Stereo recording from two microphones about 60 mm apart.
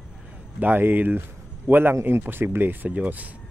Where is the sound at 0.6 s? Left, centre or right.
Right.